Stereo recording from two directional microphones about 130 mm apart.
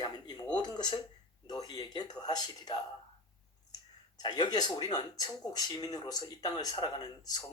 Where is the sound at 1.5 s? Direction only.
30° left (ahead or behind).